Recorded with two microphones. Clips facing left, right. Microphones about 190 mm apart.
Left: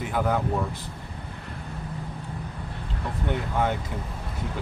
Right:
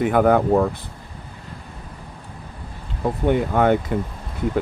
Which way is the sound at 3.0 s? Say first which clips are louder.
Right 10 dB; 60° right (ahead or behind).